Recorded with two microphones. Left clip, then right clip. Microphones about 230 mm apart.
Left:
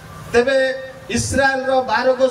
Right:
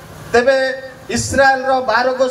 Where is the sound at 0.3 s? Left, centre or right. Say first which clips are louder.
Right 2 dB; right.